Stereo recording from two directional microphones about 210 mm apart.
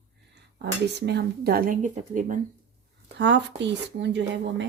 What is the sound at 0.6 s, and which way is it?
Speech, 55° right (ahead or behind).